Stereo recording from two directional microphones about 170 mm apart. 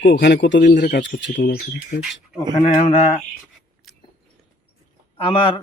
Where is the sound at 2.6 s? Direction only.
35° left (ahead or behind).